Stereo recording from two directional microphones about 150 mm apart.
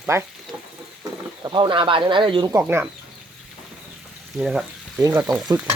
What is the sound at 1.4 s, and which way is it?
Speech, 30° right (ahead or behind).